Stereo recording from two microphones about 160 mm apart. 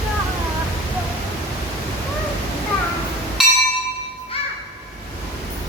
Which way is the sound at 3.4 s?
5° right (ahead or behind).